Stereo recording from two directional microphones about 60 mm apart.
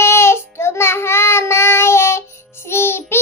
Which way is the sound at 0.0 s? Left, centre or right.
Left.